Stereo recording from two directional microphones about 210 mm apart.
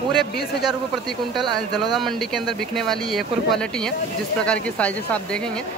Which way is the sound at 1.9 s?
Centre (ahead or behind).